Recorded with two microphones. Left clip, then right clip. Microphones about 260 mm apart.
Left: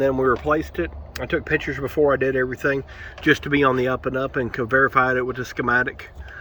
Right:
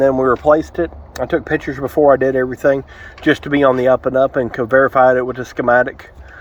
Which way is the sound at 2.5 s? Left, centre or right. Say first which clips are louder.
Right 8 dB; centre.